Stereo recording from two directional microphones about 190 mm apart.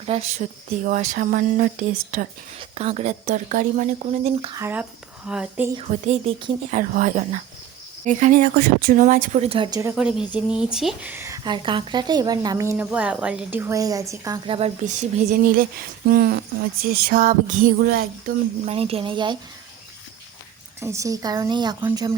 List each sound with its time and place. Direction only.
0.0 s speech: 30° right (ahead or behind)
0.9 s a sound: 40° right (ahead or behind)
2.6 s speech: 30° right (ahead or behind)
4.5 s speech: 10° right (ahead or behind)
5.7 s speech: 35° right (ahead or behind)
9.9 s speech: 5° right (ahead or behind); by 15.6 s 40° right (ahead or behind)
16.0 s a sound: 50° right (ahead or behind)
18.6 s speech: 30° right (ahead or behind)
20.8 s a woman's voice: 15° right (ahead or behind)